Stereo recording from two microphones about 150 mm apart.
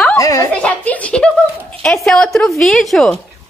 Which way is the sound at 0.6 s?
10° left (ahead or behind).